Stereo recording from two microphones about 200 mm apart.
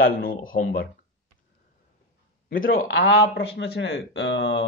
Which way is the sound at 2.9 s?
60° left (ahead or behind).